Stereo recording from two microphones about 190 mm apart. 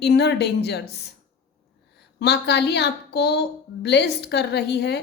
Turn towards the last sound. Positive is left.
turn(degrees=60)  # may be behind; listen again after turning